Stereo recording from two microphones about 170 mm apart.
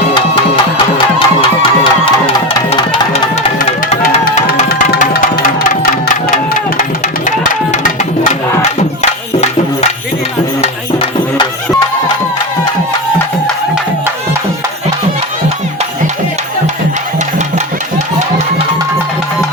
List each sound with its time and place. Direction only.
0.1 s music: 30° left (ahead or behind)
4.7 s music: 65° left (ahead or behind)